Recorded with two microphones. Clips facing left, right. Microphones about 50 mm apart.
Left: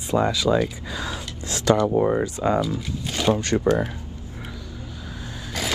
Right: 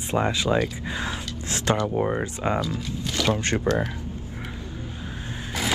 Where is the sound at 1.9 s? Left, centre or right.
Centre.